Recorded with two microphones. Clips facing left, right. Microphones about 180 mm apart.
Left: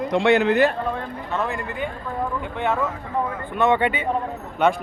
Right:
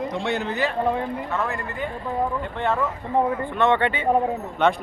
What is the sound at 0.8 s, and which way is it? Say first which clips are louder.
Speech: right 4 dB; 15° right (ahead or behind).